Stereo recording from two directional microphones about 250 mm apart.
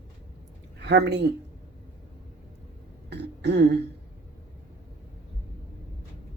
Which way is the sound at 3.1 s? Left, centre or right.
Right.